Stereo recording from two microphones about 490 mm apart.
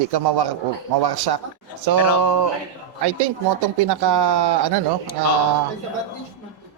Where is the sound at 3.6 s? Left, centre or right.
Right.